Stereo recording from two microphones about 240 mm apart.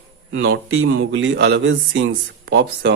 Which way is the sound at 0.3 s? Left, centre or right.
Right.